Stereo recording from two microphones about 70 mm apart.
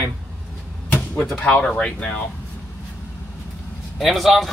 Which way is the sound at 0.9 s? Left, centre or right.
Left.